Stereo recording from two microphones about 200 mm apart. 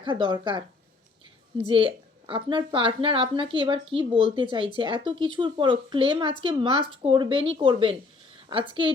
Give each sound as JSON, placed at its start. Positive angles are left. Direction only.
{"t": 0.0, "sound": "a woman's voice", "side_deg": -25}